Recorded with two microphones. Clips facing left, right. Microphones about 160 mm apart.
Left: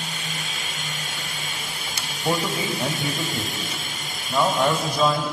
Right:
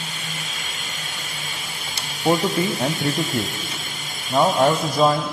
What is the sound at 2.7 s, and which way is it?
Speech, centre (ahead or behind).